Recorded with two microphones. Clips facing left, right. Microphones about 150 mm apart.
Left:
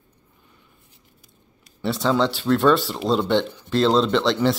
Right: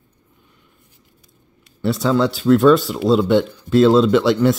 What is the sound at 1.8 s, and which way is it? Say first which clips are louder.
Speech: right 3 dB; centre (ahead or behind).